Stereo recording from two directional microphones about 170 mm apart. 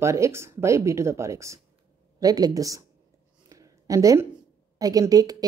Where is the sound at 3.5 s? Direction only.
20° right (ahead or behind).